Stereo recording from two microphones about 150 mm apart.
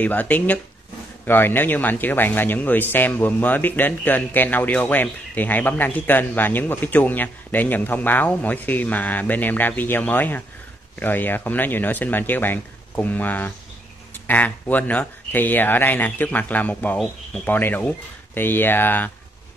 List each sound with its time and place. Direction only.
0.0 s speech: 10° left (ahead or behind)